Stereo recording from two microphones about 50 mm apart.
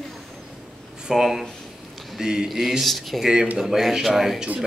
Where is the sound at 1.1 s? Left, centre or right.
Centre.